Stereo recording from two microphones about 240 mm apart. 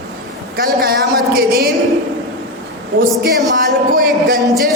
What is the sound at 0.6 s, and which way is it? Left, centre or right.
A woman's voice, right.